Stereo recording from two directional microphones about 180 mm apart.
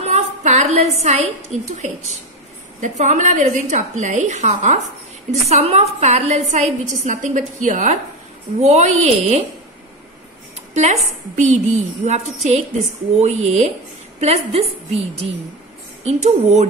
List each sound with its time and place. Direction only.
0.0 s a woman's voice: 40° right (ahead or behind)
10.7 s a woman's voice: 40° right (ahead or behind)
16.0 s a woman's voice: 40° right (ahead or behind)